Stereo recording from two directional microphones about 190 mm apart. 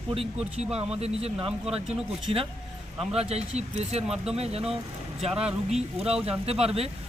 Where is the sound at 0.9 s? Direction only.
30° right (ahead or behind).